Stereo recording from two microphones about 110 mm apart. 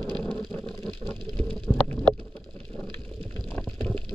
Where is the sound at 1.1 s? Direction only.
10° left (ahead or behind).